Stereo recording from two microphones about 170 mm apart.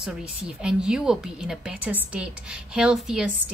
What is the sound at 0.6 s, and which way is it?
A woman's voice, 5° right (ahead or behind).